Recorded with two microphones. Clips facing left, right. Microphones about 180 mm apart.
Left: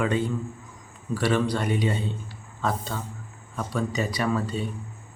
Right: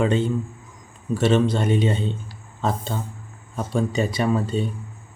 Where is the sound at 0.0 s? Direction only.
25° right (ahead or behind).